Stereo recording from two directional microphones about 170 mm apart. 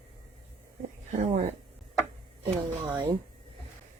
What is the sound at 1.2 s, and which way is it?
Speech, 40° right (ahead or behind).